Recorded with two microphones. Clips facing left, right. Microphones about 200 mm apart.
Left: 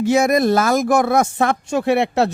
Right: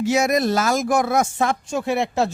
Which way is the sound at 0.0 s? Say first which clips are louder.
Left 4 dB; 55° left (ahead or behind).